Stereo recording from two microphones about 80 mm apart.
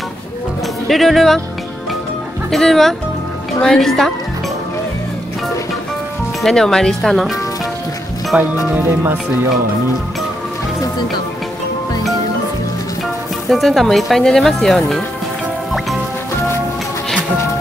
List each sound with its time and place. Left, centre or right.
0.8 s speech: centre
2.5 s speech: centre
6.4 s speech: centre
8.3 s speech: centre
13.5 s speech: centre